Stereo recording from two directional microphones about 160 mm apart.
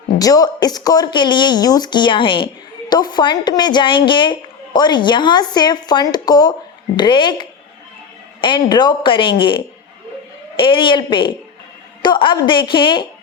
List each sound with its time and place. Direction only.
0.2 s speech: 25° left (ahead or behind)